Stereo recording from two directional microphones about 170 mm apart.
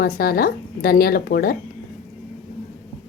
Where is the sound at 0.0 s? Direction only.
60° left (ahead or behind).